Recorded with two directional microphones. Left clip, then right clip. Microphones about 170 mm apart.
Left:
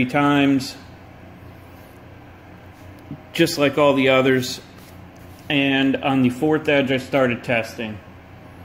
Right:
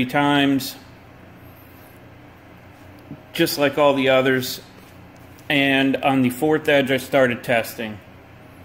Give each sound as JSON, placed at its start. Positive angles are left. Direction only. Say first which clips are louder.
{"t": 0.0, "sound": "speech", "louder": "even", "side_deg": -10}
{"t": 3.3, "sound": "a man's voice", "louder": "left 1 dB", "side_deg": 5}
{"t": 5.5, "sound": "speech", "louder": "right 1 dB", "side_deg": -20}